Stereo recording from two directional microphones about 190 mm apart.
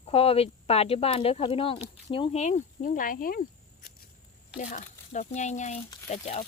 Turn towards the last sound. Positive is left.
turn(degrees=35)  # may be behind; listen again after turning